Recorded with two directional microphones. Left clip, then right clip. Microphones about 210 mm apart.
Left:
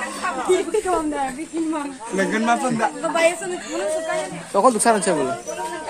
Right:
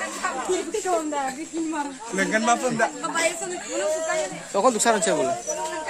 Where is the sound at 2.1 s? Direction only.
50° right (ahead or behind).